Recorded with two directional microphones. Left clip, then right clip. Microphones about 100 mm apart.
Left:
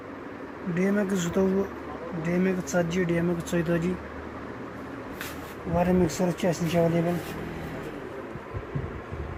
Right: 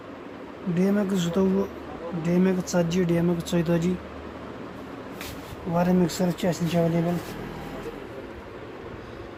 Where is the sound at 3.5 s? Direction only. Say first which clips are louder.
Right 1 dB; 20° right (ahead or behind).